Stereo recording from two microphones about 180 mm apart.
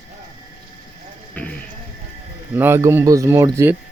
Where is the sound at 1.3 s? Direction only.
5° left (ahead or behind).